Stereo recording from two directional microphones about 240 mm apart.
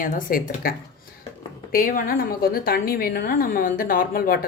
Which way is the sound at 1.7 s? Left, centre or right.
Left.